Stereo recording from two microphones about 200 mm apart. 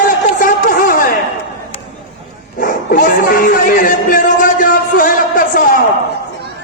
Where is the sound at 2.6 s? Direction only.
40° left (ahead or behind).